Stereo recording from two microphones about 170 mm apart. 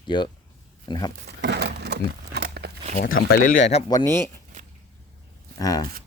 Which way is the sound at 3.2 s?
55° left (ahead or behind).